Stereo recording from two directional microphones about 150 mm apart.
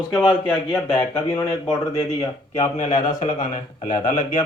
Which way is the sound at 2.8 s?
55° left (ahead or behind).